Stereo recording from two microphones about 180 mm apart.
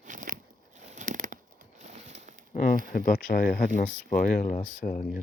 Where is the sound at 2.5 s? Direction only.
50° left (ahead or behind).